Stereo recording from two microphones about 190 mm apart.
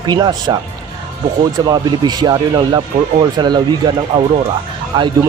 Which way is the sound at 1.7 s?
20° right (ahead or behind).